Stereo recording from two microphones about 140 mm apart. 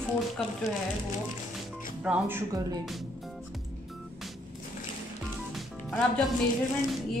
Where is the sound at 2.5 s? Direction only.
25° right (ahead or behind).